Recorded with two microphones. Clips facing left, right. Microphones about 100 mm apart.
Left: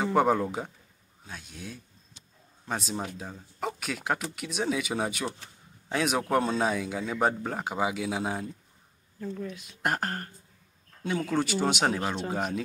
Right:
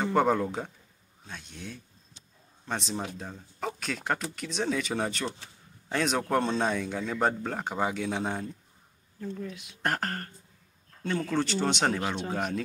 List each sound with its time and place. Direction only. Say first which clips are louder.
0.0 s a man's voice: left 1 dB; 5° left (ahead or behind)
9.4 s speech: left 1 dB; 35° left (ahead or behind)
9.8 s speech: left 1 dB; 10° left (ahead or behind)